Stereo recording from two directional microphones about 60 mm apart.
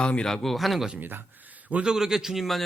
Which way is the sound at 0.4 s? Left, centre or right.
Centre.